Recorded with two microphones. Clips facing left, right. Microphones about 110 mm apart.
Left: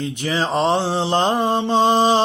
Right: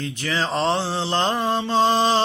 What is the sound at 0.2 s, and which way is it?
Mantra, 15° left (ahead or behind).